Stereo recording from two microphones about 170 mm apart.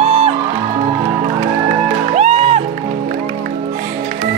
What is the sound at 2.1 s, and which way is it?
Music, 40° right (ahead or behind).